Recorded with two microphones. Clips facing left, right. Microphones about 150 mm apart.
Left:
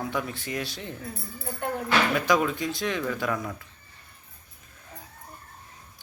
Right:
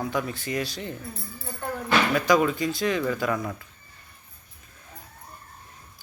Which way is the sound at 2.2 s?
Centre (ahead or behind).